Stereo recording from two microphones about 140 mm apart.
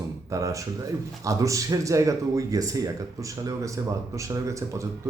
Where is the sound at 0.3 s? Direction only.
25° right (ahead or behind).